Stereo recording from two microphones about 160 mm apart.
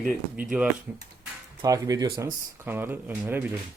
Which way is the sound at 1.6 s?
20° right (ahead or behind).